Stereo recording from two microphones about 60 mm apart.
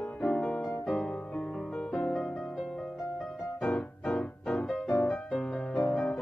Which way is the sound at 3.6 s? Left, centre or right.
Centre.